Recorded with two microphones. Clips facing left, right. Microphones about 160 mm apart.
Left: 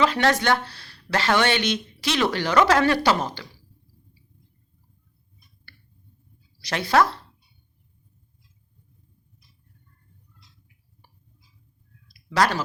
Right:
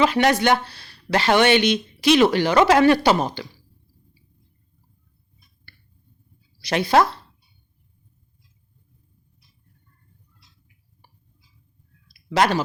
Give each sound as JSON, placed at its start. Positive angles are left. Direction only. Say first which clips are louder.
{"t": 0.0, "sound": "speech", "louder": "right 3 dB", "side_deg": -15}
{"t": 6.7, "sound": "speech", "louder": "right 3 dB", "side_deg": -15}
{"t": 12.3, "sound": "speech", "louder": "right 3 dB", "side_deg": -20}